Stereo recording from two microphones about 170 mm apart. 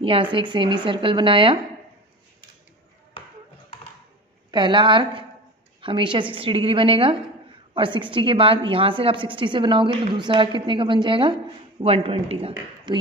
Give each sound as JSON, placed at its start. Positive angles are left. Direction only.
{"t": 0.0, "sound": "a woman's voice", "side_deg": -30}
{"t": 4.5, "sound": "a woman's voice", "side_deg": -25}